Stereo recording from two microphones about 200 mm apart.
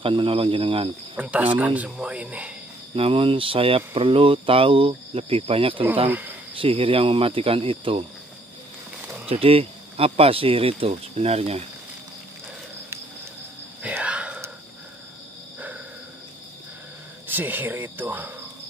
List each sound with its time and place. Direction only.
0.0 s speech: 25° right (ahead or behind)
1.1 s speech: 5° right (ahead or behind)
3.0 s speech: 25° right (ahead or behind)
6.0 s speech: 10° right (ahead or behind)
6.6 s speech: 25° right (ahead or behind)
9.3 s speech: 30° right (ahead or behind)
13.8 s whispering: 5° right (ahead or behind)
17.3 s speech: 10° right (ahead or behind)